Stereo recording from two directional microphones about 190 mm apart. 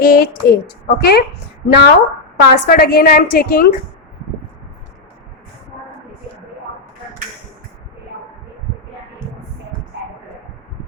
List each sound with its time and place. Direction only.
0.0 s a woman's voice: 50° left (ahead or behind)